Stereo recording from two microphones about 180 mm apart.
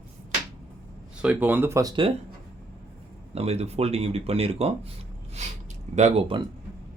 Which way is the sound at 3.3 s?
35° right (ahead or behind).